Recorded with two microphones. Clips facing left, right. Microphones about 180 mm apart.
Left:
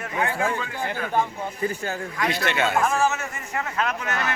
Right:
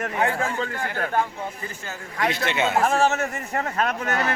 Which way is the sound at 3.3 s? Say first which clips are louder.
Right 2 dB; 40° right (ahead or behind).